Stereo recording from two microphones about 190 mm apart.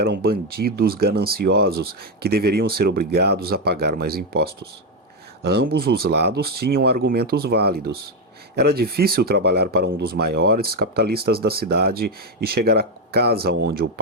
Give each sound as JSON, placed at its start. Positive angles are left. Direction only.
{"t": 0.0, "sound": "speech", "side_deg": -55}
{"t": 5.5, "sound": "speech", "side_deg": -55}